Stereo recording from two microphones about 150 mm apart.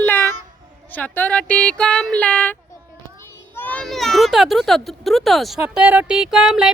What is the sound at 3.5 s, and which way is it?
A woman's voice, 10° left (ahead or behind).